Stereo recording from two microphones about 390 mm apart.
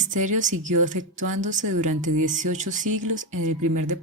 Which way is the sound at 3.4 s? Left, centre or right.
Right.